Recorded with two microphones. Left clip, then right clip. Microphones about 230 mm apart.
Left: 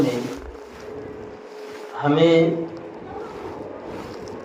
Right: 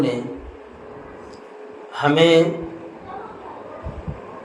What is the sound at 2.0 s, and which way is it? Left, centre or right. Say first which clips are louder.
Speech: right 2 dB; right.